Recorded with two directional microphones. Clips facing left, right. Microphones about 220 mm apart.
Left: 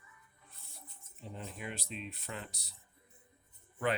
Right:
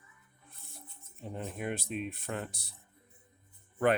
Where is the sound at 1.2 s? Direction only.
50° right (ahead or behind).